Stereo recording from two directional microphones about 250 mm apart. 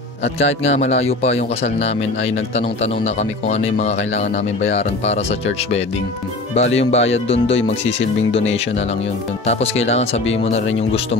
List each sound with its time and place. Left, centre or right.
0.4 s a man's voice: left
6.5 s a man's voice: left